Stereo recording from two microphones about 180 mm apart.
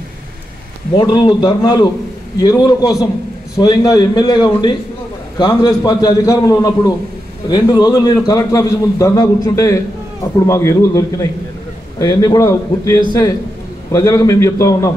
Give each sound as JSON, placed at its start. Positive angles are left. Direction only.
{"t": 0.9, "sound": "a man's voice", "side_deg": 25}